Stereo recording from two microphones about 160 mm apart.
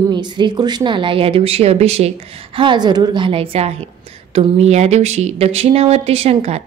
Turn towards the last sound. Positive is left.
turn(degrees=-40)  # may be behind; listen again after turning